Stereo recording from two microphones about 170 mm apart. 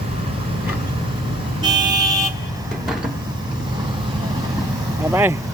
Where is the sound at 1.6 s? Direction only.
25° right (ahead or behind).